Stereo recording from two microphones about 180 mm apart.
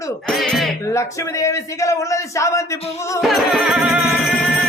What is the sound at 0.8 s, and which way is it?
Speech, 15° left (ahead or behind).